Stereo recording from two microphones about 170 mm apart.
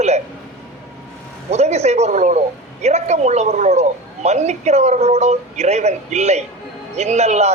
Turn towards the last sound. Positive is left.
turn(degrees=-40)  # may be behind; listen again after turning